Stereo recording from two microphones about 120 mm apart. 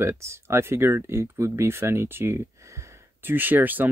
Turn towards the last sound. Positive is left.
turn(degrees=-15)  # may be behind; listen again after turning